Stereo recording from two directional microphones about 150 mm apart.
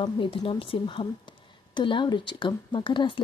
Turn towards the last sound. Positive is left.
turn(degrees=30)  # may be behind; listen again after turning